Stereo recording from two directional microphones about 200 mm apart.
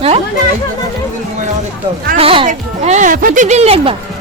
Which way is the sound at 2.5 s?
40° right (ahead or behind).